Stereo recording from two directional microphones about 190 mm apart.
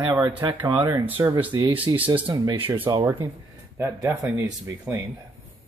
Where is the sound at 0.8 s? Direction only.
10° right (ahead or behind); by 3.1 s 25° right (ahead or behind).